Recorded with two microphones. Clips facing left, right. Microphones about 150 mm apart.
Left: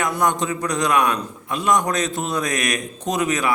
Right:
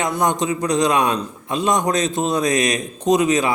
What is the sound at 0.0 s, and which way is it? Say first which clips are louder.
A man's voice: right 1 dB; 20° right (ahead or behind).